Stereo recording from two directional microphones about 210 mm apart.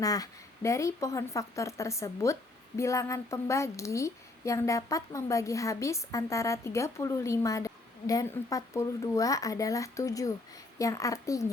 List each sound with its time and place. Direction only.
0.0 s a woman's voice: 15° left (ahead or behind)